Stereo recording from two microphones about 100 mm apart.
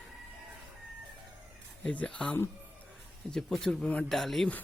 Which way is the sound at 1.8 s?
10° left (ahead or behind).